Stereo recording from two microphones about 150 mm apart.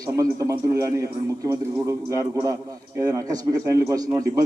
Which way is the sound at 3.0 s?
25° right (ahead or behind).